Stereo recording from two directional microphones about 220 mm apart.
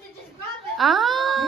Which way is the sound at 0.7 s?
Centre (ahead or behind).